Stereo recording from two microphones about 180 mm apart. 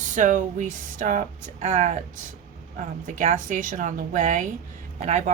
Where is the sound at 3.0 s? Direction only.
45° right (ahead or behind).